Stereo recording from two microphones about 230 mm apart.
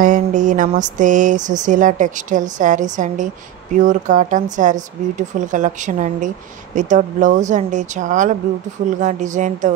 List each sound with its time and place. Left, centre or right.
0.0 s speech: right